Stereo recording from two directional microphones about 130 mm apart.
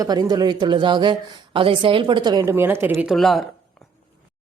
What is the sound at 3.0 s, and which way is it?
Speech, centre (ahead or behind).